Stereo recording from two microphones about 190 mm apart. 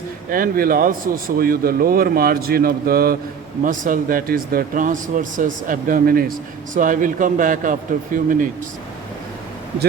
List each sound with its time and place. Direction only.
0.3 s a man's voice: 50° right (ahead or behind)